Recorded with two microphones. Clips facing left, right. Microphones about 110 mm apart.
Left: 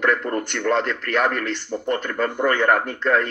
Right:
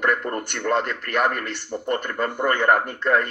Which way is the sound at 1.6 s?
5° right (ahead or behind).